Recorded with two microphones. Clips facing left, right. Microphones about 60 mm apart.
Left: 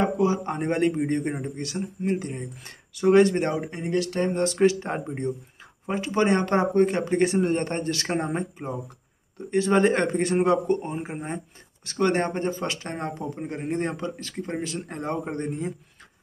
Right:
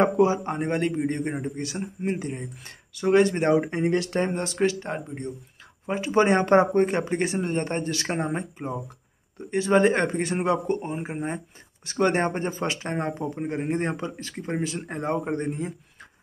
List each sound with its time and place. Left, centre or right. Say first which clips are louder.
0.4 s speech: left 2 dB; centre
1.8 s speech: left 3 dB; right
2.1 s speech: left 1 dB; centre
3.6 s speech: right 2 dB; right
4.3 s speech: left 3 dB; centre
4.6 s speech: left 3 dB; centre
5.9 s speech: right 3 dB; centre
6.2 s speech: right 2 dB; centre